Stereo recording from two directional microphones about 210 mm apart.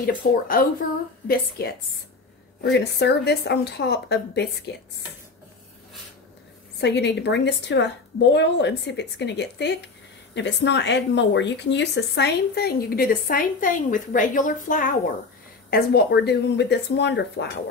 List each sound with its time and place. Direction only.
0.5 s speech: 45° left (ahead or behind)
6.8 s a woman's voice: 55° left (ahead or behind)